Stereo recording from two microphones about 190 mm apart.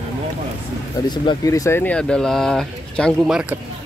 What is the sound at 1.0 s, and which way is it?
Speech, 20° left (ahead or behind).